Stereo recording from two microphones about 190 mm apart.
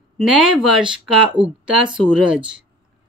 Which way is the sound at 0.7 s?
5° right (ahead or behind).